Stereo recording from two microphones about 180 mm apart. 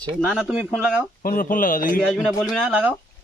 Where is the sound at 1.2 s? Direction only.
50° left (ahead or behind).